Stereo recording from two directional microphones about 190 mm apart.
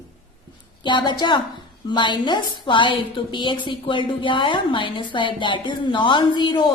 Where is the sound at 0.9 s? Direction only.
25° left (ahead or behind).